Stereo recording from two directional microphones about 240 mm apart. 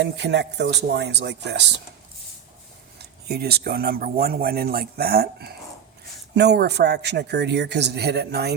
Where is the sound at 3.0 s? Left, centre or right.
Right.